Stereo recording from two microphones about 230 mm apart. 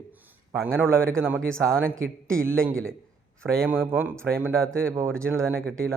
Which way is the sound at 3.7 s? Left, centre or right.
Centre.